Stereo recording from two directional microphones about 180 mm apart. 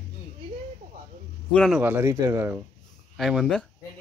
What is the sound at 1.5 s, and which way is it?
Speech, centre (ahead or behind).